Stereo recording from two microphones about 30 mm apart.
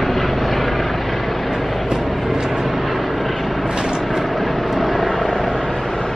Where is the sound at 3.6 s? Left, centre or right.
Right.